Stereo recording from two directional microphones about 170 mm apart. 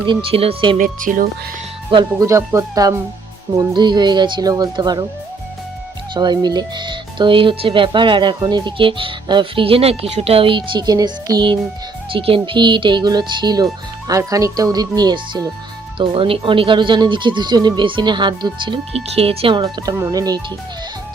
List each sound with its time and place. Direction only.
0.1 s speech: 30° right (ahead or behind)
0.8 s speech: 55° right (ahead or behind)
2.1 s speech: 15° right (ahead or behind)
6.1 s speech: 25° right (ahead or behind)